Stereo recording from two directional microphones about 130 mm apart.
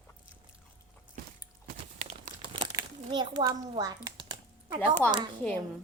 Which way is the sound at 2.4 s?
40° right (ahead or behind).